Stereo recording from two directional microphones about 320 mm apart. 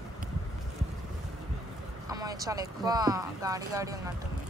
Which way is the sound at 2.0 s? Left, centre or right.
Centre.